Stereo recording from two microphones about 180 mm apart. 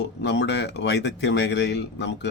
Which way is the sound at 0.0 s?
70° left (ahead or behind).